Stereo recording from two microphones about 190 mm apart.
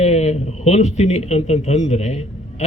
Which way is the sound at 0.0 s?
35° left (ahead or behind).